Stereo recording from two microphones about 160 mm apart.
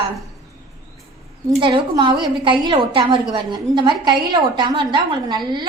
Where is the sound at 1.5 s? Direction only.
30° right (ahead or behind).